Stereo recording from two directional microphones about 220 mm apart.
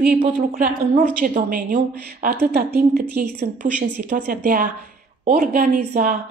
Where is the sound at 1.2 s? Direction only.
40° right (ahead or behind).